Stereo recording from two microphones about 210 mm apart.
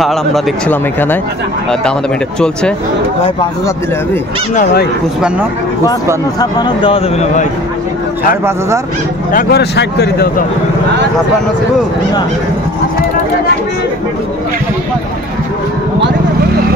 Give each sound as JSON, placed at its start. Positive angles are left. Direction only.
{"t": 0.0, "sound": "speech", "side_deg": 0}
{"t": 6.4, "sound": "speech", "side_deg": 20}
{"t": 8.5, "sound": "speech", "side_deg": -15}
{"t": 9.3, "sound": "speech", "side_deg": 45}